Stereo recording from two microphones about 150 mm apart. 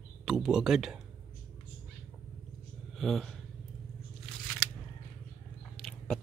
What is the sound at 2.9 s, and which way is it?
Speech, centre (ahead or behind).